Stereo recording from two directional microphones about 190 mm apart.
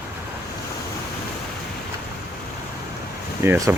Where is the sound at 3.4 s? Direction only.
15° right (ahead or behind).